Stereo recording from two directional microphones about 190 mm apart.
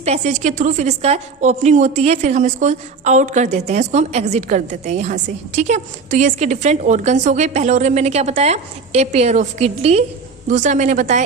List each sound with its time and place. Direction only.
0.0 s a woman's voice: 35° right (ahead or behind)